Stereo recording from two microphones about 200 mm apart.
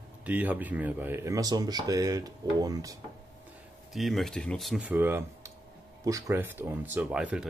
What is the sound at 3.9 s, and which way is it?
Speech, centre (ahead or behind).